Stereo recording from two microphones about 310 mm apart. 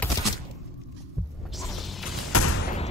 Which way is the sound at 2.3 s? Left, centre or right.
Left.